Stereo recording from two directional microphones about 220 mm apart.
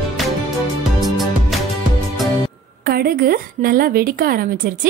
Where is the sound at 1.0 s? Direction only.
Centre (ahead or behind).